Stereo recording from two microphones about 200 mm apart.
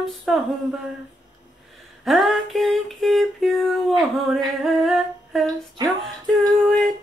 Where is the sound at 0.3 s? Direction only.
Centre (ahead or behind).